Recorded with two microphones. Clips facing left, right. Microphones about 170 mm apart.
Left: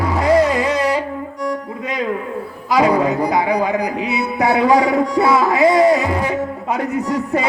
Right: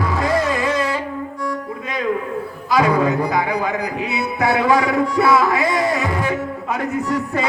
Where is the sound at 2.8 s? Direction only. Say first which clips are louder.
Left 2 dB; 30° left (ahead or behind).